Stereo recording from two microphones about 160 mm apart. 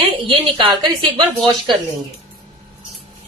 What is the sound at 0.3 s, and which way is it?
A woman's voice, 30° right (ahead or behind).